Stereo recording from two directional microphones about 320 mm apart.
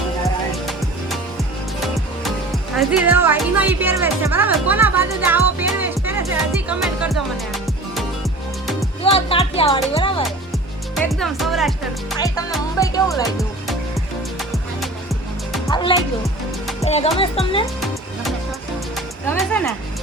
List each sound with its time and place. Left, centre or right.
0.5 s music: centre
2.2 s speech: centre
6.7 s music: centre
9.1 s music: centre
10.9 s speech: centre
12.8 s speech: centre
13.3 s music: centre
15.5 s music: centre
16.0 s music: centre
16.8 s music: centre
17.2 s speech: centre
17.7 s music: centre